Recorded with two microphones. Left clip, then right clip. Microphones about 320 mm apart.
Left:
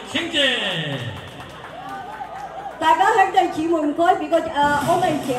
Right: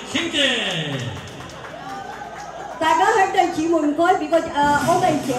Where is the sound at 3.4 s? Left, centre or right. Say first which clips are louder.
Even; centre.